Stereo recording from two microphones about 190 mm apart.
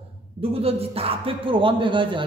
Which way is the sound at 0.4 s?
30° right (ahead or behind).